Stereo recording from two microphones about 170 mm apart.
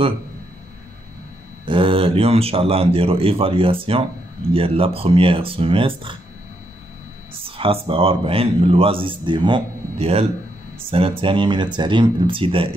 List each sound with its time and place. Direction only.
1.7 s a man's voice: 30° right (ahead or behind)
7.4 s a man's voice: 35° right (ahead or behind)